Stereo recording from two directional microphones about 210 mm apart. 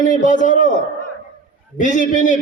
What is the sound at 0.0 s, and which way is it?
Speech, 35° left (ahead or behind).